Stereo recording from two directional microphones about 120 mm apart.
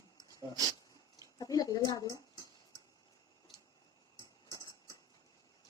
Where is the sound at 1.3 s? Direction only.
30° left (ahead or behind).